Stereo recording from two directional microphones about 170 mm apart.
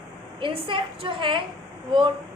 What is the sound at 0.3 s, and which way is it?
A woman's voice, 30° right (ahead or behind).